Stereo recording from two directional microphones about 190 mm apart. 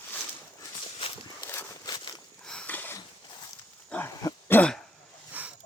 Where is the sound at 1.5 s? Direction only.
15° left (ahead or behind).